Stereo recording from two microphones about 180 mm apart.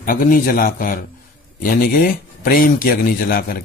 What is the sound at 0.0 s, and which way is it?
Speech, 50° left (ahead or behind).